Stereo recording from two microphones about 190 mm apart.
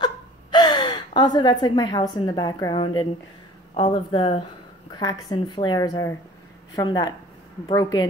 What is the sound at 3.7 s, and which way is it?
A woman's voice, 25° left (ahead or behind).